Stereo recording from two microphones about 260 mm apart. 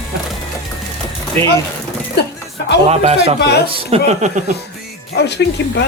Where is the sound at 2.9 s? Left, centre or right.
Right.